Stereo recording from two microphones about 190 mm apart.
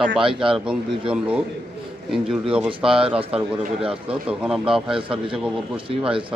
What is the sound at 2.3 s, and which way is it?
Speech, 5° right (ahead or behind).